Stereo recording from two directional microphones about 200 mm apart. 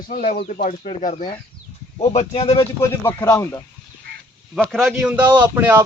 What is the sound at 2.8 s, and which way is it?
Speech, 15° left (ahead or behind).